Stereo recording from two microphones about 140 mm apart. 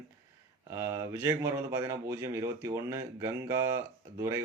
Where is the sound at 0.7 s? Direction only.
15° right (ahead or behind).